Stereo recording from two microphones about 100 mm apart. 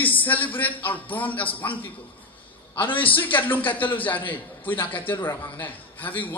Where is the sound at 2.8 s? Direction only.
15° left (ahead or behind).